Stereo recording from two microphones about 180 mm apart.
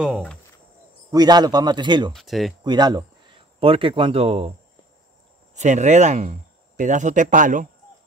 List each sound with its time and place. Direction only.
1.1 s a man's voice: 20° right (ahead or behind)
2.1 s speech: centre (ahead or behind)
2.6 s a man's voice: 25° right (ahead or behind); by 7.6 s 45° right (ahead or behind)